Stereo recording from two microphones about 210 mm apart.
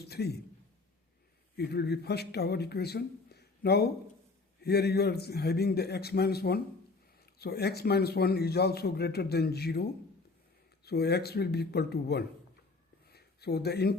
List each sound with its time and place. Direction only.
0.0 s a man's voice: 50° left (ahead or behind)
1.5 s a man's voice: 50° left (ahead or behind)
10.8 s a man's voice: 50° left (ahead or behind)
13.1 s a sound: 50° left (ahead or behind)